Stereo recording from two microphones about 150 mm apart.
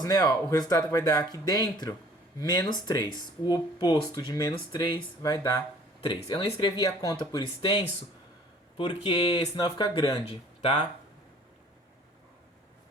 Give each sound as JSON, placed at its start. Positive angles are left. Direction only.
{"t": 0.0, "sound": "speech", "side_deg": 25}